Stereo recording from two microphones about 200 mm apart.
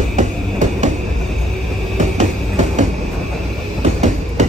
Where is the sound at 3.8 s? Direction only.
35° right (ahead or behind).